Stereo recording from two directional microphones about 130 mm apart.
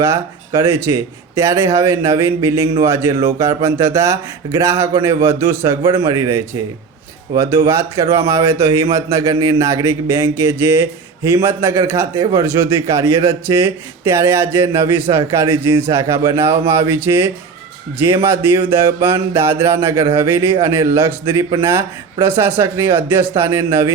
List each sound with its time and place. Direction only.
0.0 s speech: 20° right (ahead or behind)